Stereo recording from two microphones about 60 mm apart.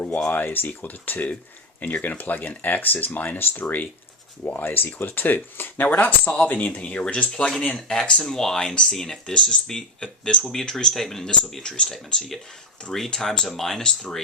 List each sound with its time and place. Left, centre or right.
0.3 s speech: left; by 14.2 s centre